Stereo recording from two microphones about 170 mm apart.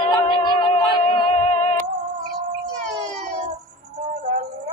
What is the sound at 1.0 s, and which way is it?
Music, 40° left (ahead or behind).